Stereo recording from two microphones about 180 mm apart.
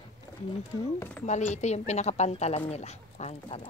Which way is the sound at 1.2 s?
40° left (ahead or behind).